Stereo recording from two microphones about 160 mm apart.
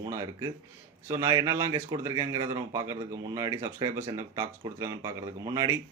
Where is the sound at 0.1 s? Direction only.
20° right (ahead or behind).